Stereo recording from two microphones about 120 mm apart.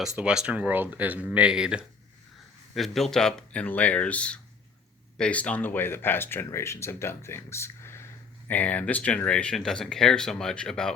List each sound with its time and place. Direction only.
0.2 s speech: 10° right (ahead or behind)